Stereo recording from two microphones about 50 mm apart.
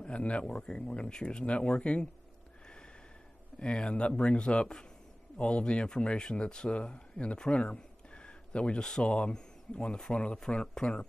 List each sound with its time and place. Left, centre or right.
0.0 s speech: left
3.5 s speech: left
7.6 s a sound: left
9.0 s speech: left